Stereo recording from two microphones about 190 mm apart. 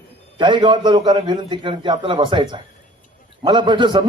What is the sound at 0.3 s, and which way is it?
A man's voice, 25° right (ahead or behind).